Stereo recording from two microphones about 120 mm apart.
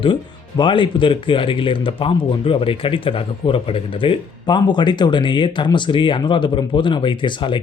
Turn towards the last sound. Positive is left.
turn(degrees=40)  # may be behind; listen again after turning